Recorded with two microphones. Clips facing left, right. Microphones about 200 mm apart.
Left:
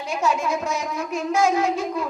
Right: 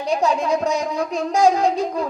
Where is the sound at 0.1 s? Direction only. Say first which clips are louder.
Right 4 dB; 35° right (ahead or behind).